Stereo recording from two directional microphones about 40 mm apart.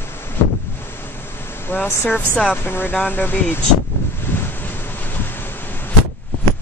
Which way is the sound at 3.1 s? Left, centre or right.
Left.